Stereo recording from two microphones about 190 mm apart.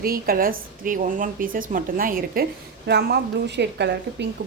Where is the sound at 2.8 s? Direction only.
60° right (ahead or behind).